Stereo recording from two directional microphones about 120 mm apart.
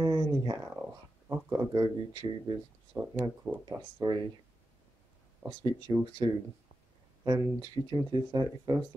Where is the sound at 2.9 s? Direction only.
15° right (ahead or behind).